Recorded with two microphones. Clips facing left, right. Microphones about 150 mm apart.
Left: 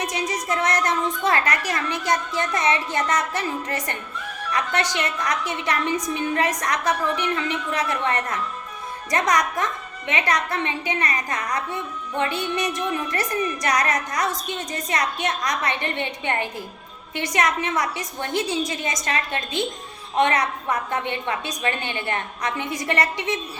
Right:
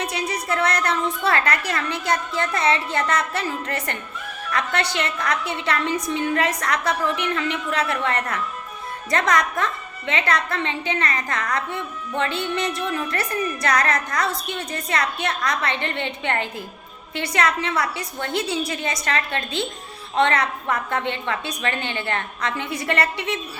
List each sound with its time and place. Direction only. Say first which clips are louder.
0.0 s a woman's voice: even; 15° left (ahead or behind)